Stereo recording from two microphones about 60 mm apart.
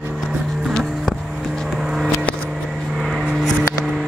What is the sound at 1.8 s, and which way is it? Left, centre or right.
Vehicle, centre.